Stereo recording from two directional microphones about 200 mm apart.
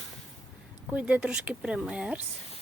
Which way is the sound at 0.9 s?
5° right (ahead or behind).